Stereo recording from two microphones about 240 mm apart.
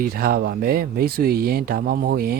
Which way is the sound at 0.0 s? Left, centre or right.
Right.